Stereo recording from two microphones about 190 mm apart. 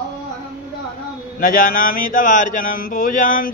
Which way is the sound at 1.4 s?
45° left (ahead or behind).